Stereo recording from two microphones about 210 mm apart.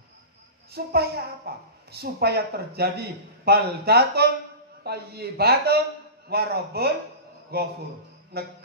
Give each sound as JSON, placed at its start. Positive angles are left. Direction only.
{"t": 0.7, "sound": "a woman's voice", "side_deg": -50}